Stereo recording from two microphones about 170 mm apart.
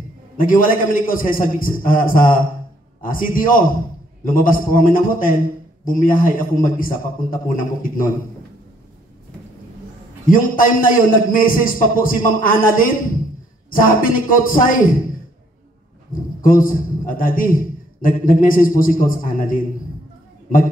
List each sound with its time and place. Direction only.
0.4 s a man's voice: 55° left (ahead or behind)
10.2 s a man's voice: 55° left (ahead or behind)
16.3 s a man's voice: 55° left (ahead or behind)